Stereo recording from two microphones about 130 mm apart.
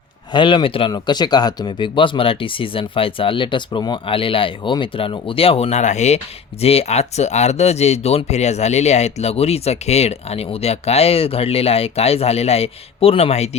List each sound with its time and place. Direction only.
0.3 s speech: 40° left (ahead or behind); by 6.1 s 60° left (ahead or behind)
6.6 s speech: 50° left (ahead or behind)